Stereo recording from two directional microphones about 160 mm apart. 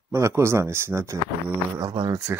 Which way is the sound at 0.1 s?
15° right (ahead or behind).